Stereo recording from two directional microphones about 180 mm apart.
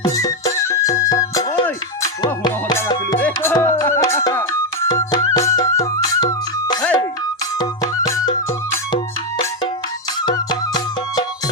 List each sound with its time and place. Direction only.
0.0 s music: 15° left (ahead or behind)
10.2 s music: 25° left (ahead or behind)